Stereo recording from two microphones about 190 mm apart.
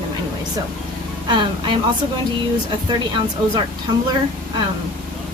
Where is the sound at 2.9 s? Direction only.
25° right (ahead or behind).